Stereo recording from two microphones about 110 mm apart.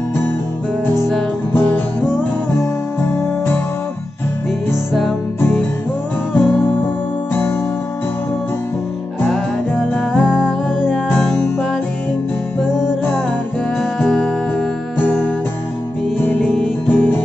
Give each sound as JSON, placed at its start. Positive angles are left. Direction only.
{"t": 1.5, "sound": "music", "side_deg": 15}
{"t": 4.6, "sound": "music", "side_deg": 0}
{"t": 6.3, "sound": "music", "side_deg": 15}
{"t": 10.2, "sound": "music", "side_deg": -5}
{"t": 13.7, "sound": "music", "side_deg": 0}
{"t": 16.9, "sound": "music", "side_deg": 15}